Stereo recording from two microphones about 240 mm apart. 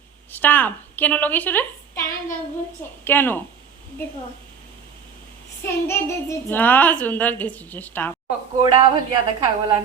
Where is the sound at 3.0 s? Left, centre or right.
Centre.